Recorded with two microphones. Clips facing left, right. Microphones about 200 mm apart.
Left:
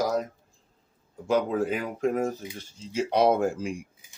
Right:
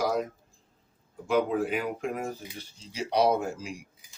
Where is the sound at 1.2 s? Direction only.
40° left (ahead or behind).